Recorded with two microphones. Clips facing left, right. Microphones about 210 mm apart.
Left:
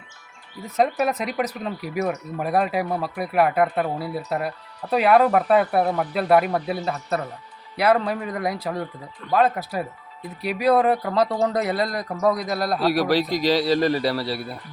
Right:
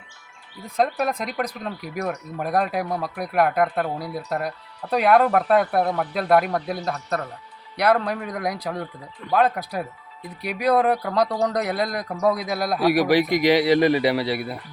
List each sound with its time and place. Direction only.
0.6 s speech: 5° left (ahead or behind)
12.8 s a man's voice: 15° right (ahead or behind)